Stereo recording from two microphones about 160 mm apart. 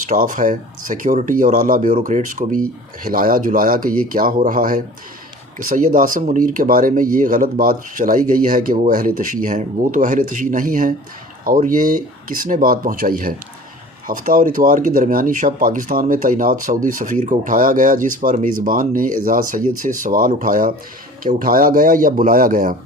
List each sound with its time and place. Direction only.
0.0 s speech: 50° right (ahead or behind)